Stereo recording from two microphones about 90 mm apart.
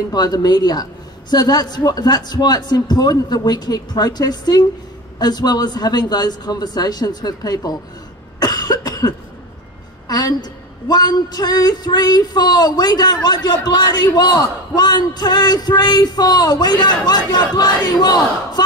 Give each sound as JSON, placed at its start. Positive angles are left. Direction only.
{"t": 0.1, "sound": "a man's voice", "side_deg": 45}
{"t": 8.4, "sound": "cough", "side_deg": 45}
{"t": 10.0, "sound": "a man's voice", "side_deg": 45}